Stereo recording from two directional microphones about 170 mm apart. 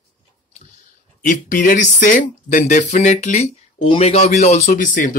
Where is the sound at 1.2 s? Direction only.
50° left (ahead or behind).